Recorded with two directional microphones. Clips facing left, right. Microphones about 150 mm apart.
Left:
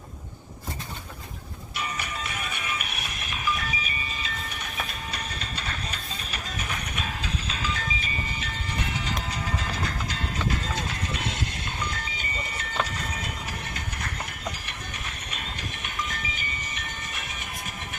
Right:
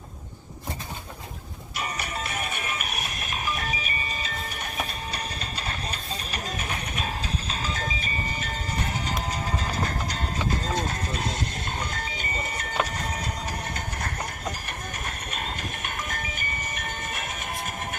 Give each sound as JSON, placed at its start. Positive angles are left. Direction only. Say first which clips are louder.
{"t": 1.7, "sound": "music", "louder": "right 1 dB", "side_deg": -40}
{"t": 15.0, "sound": "music", "louder": "right 4 dB", "side_deg": -45}